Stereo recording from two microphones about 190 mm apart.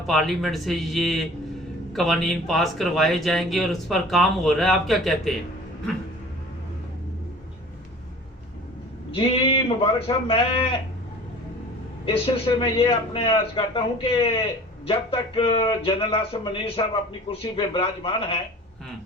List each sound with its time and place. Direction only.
0.1 s speech: centre (ahead or behind)
9.1 s speech: 30° left (ahead or behind)
12.0 s speech: 30° left (ahead or behind)